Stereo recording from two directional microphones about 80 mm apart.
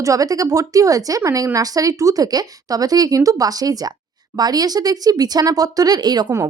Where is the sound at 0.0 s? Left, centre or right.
Right.